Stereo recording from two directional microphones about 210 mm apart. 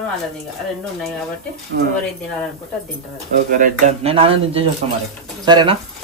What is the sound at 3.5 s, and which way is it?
Speech, 35° right (ahead or behind).